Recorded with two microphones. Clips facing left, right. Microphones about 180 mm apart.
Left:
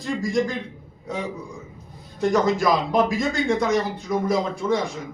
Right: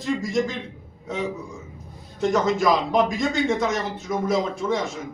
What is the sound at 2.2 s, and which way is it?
A man's voice, centre (ahead or behind).